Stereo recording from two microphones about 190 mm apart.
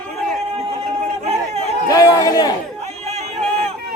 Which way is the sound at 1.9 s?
20° left (ahead or behind).